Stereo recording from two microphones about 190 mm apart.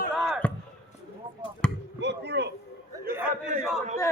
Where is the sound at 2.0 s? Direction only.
65° right (ahead or behind).